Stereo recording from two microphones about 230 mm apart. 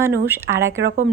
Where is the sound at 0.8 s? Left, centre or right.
Right.